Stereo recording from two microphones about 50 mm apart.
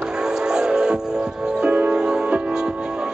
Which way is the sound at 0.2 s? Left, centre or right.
Centre.